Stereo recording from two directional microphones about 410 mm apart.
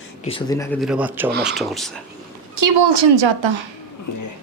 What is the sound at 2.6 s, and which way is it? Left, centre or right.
A woman's voice, right.